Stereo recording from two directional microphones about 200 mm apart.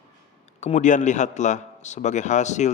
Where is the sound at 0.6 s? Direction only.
35° left (ahead or behind).